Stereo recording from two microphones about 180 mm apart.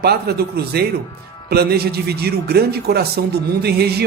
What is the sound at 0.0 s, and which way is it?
Speech, 60° right (ahead or behind).